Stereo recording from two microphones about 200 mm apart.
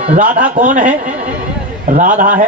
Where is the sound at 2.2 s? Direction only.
40° right (ahead or behind).